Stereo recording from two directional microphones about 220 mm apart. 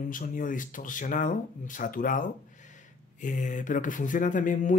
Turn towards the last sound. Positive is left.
turn(degrees=35)  # may be behind; listen again after turning